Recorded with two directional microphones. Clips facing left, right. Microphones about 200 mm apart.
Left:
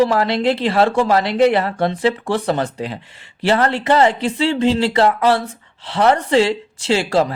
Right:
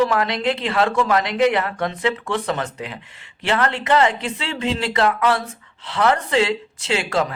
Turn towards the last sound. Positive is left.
turn(degrees=30)  # may be behind; listen again after turning